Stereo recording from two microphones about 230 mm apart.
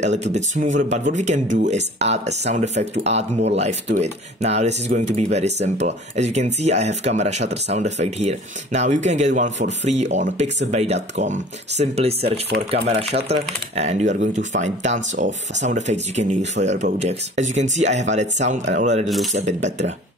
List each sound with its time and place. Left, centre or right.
0.0 s speech: right
12.4 s speech: right
13.3 s speech: right